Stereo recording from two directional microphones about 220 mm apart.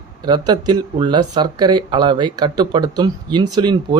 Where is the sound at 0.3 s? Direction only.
20° right (ahead or behind).